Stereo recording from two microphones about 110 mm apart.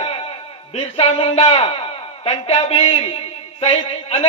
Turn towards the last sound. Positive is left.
turn(degrees=65)  # may be behind; listen again after turning